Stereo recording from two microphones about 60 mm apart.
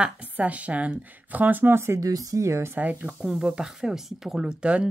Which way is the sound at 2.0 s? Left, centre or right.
Right.